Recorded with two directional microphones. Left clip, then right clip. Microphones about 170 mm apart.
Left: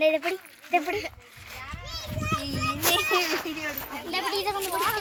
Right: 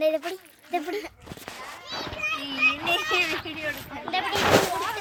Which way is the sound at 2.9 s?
20° right (ahead or behind).